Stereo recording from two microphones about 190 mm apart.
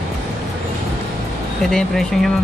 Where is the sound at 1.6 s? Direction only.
Centre (ahead or behind).